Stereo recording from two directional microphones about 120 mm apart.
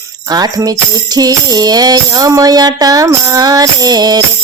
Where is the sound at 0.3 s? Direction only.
30° right (ahead or behind).